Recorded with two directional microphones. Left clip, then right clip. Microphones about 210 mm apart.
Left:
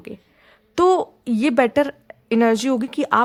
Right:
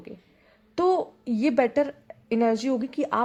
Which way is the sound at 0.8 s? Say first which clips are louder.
Left 7 dB; 35° left (ahead or behind).